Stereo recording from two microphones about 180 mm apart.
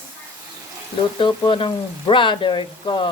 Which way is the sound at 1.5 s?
30° left (ahead or behind).